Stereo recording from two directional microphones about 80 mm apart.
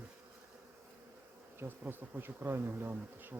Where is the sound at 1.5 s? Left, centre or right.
Right.